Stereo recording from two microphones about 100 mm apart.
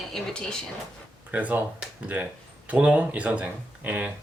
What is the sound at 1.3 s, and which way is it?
Speech, 15° right (ahead or behind).